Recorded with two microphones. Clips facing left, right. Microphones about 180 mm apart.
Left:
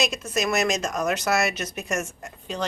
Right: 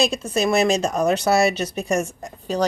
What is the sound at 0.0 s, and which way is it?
Speech, 30° right (ahead or behind).